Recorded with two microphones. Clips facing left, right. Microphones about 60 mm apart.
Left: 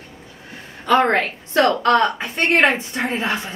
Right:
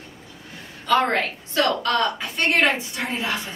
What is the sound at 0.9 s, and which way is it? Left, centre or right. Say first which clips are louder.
A woman's voice: left 4 dB; left.